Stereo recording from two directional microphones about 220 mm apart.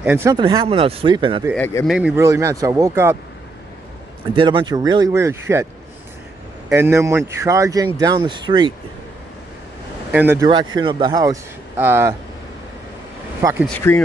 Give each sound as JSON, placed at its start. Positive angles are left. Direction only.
{"t": 0.0, "sound": "speech", "side_deg": -10}
{"t": 0.4, "sound": "speech", "side_deg": -20}
{"t": 1.5, "sound": "speech", "side_deg": 10}
{"t": 1.9, "sound": "speech", "side_deg": -5}
{"t": 4.4, "sound": "speech", "side_deg": -20}
{"t": 6.7, "sound": "speech", "side_deg": -10}
{"t": 10.1, "sound": "speech", "side_deg": -10}
{"t": 13.4, "sound": "speech", "side_deg": -15}
{"t": 13.7, "sound": "speech", "side_deg": 10}